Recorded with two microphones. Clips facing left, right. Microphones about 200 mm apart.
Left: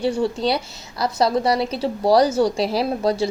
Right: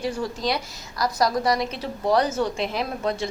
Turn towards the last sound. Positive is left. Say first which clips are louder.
# left 6 dB
turn(degrees=35)  # may be behind; listen again after turning